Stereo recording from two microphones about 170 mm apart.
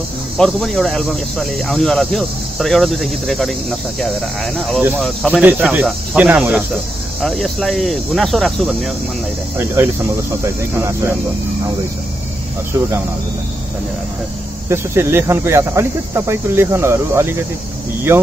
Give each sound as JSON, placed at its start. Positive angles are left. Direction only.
{"t": 0.4, "sound": "speech", "side_deg": 0}
{"t": 5.4, "sound": "speech", "side_deg": -10}
{"t": 7.2, "sound": "speech", "side_deg": 0}
{"t": 9.6, "sound": "speech", "side_deg": -15}
{"t": 14.7, "sound": "speech", "side_deg": -15}